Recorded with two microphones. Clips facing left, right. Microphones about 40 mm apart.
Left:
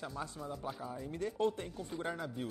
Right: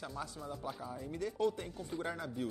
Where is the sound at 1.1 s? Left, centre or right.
Left.